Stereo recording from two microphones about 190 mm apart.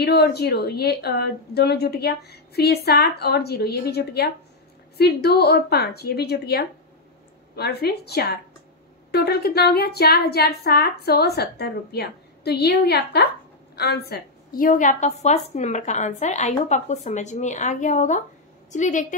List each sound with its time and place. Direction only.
0.0 s a woman's voice: 55° left (ahead or behind); by 19.1 s 40° left (ahead or behind)